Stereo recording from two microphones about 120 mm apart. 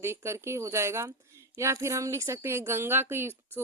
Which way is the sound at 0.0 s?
20° right (ahead or behind).